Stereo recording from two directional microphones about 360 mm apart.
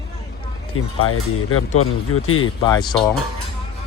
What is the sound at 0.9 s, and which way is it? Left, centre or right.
Speech, left.